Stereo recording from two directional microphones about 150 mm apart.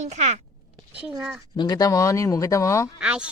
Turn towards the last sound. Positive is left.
turn(degrees=-5)  # may be behind; listen again after turning